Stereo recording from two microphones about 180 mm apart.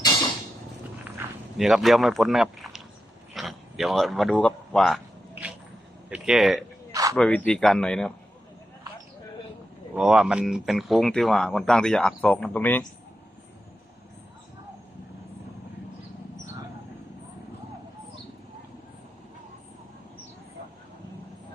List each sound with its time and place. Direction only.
1.5 s speech: centre (ahead or behind)
5.3 s a sound: 10° right (ahead or behind)
6.1 s speech: 5° right (ahead or behind)
6.9 s a sound: 20° right (ahead or behind)
7.2 s speech: 5° left (ahead or behind)
9.9 s speech: 5° right (ahead or behind)